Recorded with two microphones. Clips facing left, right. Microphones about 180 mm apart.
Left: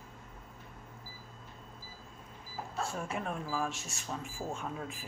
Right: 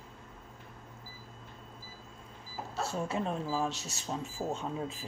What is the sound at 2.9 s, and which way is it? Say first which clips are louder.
Speech: right 4 dB; 25° right (ahead or behind).